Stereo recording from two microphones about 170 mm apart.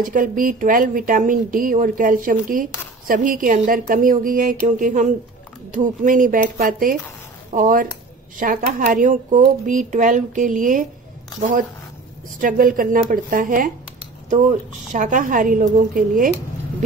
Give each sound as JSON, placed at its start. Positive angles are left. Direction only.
{"t": 0.0, "sound": "speech", "side_deg": -55}
{"t": 12.4, "sound": "speech", "side_deg": -50}